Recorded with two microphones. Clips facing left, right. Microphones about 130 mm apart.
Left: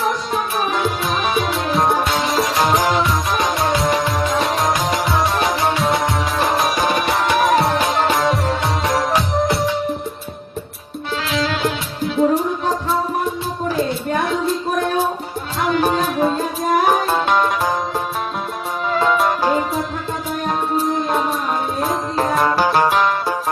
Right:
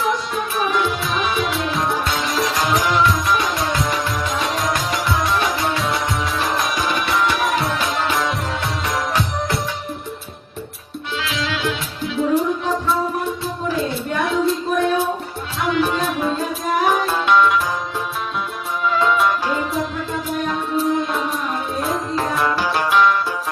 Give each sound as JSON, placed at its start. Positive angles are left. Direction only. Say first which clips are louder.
{"t": 0.6, "sound": "music", "louder": "even", "side_deg": 45}
{"t": 11.2, "sound": "music", "louder": "left 4 dB", "side_deg": 40}
{"t": 15.6, "sound": "music", "louder": "left 2 dB", "side_deg": 40}
{"t": 18.8, "sound": "music", "louder": "even", "side_deg": 45}